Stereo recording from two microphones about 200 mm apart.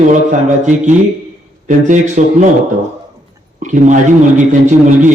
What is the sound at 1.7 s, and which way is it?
Speech, 40° right (ahead or behind).